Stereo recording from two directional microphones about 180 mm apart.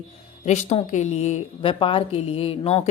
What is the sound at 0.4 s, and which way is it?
A woman's voice, 40° left (ahead or behind).